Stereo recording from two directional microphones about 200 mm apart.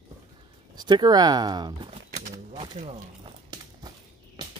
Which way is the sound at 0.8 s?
20° right (ahead or behind).